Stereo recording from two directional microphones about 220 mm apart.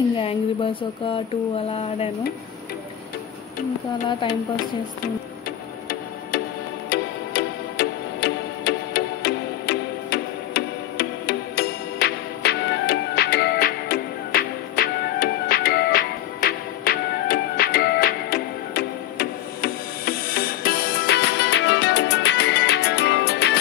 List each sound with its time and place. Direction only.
0.2 s speech: 25° left (ahead or behind)
6.9 s music: 50° left (ahead or behind)